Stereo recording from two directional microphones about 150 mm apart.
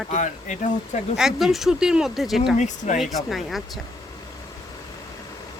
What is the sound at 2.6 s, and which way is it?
Speech, 50° left (ahead or behind).